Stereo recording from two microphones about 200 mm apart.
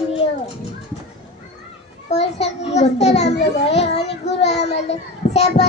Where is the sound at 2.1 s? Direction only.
35° left (ahead or behind).